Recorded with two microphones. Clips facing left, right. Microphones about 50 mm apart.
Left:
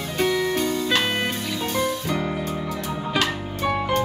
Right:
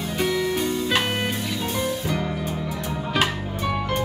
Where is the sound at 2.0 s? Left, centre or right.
Centre.